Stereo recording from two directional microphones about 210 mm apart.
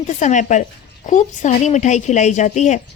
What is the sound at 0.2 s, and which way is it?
Speech, 35° left (ahead or behind).